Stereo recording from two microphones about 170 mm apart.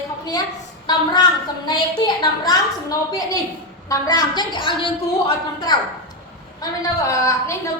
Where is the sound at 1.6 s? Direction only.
25° left (ahead or behind).